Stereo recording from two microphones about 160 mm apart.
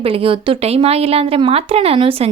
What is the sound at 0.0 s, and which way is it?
Speech, 35° right (ahead or behind).